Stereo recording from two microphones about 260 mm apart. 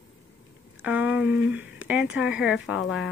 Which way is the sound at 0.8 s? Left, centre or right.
Centre.